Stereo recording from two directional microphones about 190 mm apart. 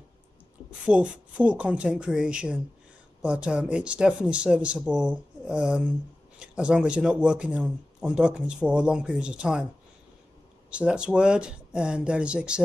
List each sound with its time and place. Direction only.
0.8 s speech: 5° right (ahead or behind)
10.7 s speech: 5° right (ahead or behind)